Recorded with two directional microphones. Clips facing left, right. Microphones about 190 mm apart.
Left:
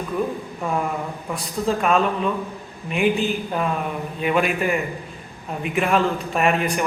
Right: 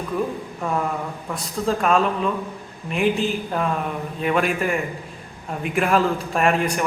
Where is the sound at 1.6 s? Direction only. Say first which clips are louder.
Even; centre (ahead or behind).